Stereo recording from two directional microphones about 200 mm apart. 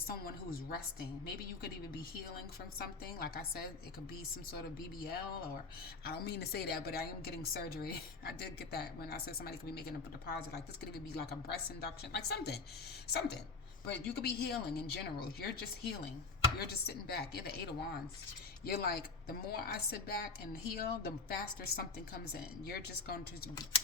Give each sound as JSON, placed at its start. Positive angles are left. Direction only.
{"t": 0.1, "sound": "a woman's voice", "side_deg": 50}
{"t": 2.7, "sound": "a woman's voice", "side_deg": 50}
{"t": 4.9, "sound": "a woman's voice", "side_deg": 50}